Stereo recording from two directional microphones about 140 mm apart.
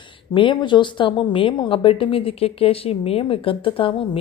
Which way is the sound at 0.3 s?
35° left (ahead or behind).